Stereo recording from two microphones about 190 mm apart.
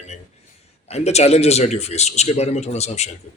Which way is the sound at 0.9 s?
35° left (ahead or behind).